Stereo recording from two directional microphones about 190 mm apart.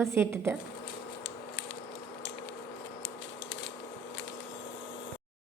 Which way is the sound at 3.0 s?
90° left.